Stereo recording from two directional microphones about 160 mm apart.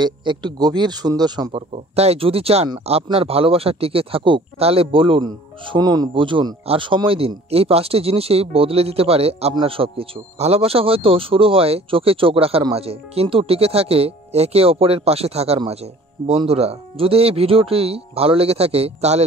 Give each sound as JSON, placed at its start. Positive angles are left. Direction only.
{"t": 0.0, "sound": "speech", "side_deg": -30}
{"t": 2.0, "sound": "speech", "side_deg": -40}